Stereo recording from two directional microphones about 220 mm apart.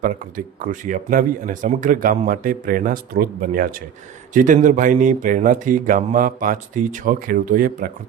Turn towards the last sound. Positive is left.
turn(degrees=-40)  # may be behind; listen again after turning